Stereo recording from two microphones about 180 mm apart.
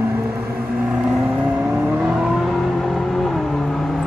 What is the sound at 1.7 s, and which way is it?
Vehicle, 5° right (ahead or behind).